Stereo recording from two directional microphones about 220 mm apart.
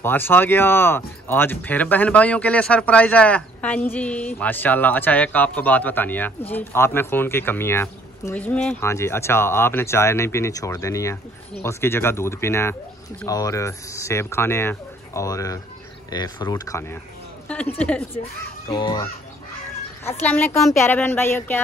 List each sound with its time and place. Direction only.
0.0 s a woman's voice: 10° left (ahead or behind)
18.7 s speech: 20° left (ahead or behind)
20.1 s speech: 10° left (ahead or behind)